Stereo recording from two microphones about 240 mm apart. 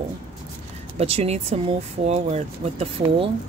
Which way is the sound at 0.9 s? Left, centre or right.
Right.